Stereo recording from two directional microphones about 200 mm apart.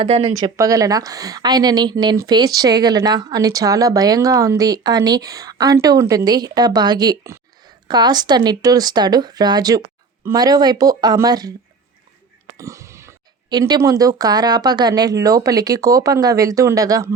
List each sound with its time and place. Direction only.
0.0 s speech: 30° right (ahead or behind)
0.3 s a woman's voice: 20° right (ahead or behind)
12.5 s speech: 15° right (ahead or behind)